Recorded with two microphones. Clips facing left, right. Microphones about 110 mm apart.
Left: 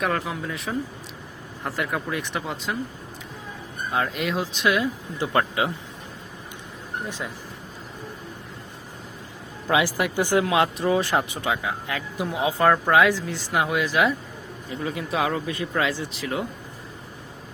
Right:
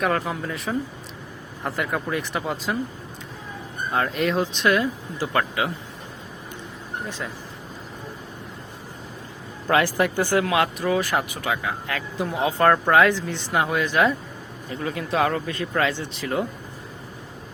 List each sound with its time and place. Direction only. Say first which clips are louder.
0.0 s speech: right 2 dB; centre (ahead or behind)
3.9 s speech: right 3 dB; centre (ahead or behind)
5.1 s speech: left 1 dB; 25° left (ahead or behind)
9.6 s speech: right 2 dB; 10° left (ahead or behind)